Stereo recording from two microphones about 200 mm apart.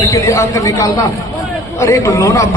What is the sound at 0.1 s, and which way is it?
A man's voice, 15° left (ahead or behind).